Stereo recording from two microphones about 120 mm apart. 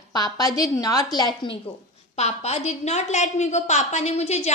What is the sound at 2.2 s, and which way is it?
A woman's voice, 65° left (ahead or behind).